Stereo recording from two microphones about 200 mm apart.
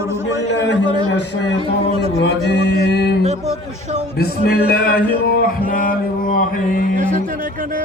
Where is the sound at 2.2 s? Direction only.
55° left (ahead or behind).